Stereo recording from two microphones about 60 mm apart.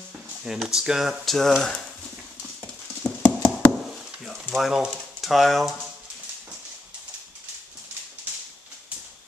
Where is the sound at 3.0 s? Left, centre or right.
Left.